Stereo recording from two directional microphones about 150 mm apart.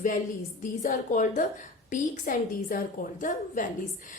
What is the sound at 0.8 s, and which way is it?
A woman's voice, 55° left (ahead or behind).